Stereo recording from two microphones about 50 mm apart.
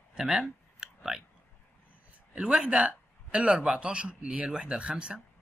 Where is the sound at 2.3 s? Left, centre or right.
Right.